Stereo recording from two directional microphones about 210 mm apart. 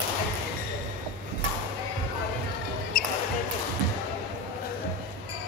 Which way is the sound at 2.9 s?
40° left (ahead or behind).